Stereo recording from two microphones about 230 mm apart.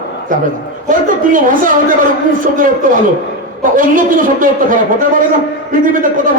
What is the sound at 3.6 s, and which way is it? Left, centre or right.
A man's voice, right.